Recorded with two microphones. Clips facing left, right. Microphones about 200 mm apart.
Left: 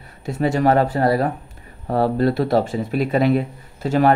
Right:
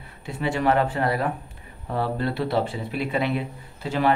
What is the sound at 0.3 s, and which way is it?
Speech, 45° left (ahead or behind).